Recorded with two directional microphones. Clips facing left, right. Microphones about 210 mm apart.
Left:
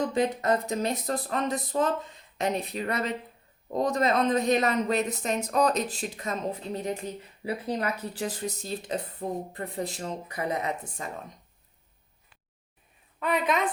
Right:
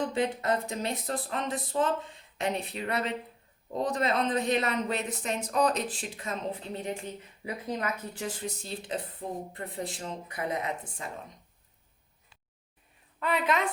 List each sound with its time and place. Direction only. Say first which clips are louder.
0.0 s speech: left 3 dB; 40° left (ahead or behind)
13.2 s a woman's voice: left 2 dB; 20° left (ahead or behind)